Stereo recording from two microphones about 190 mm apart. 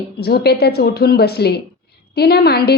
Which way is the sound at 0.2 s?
55° left (ahead or behind).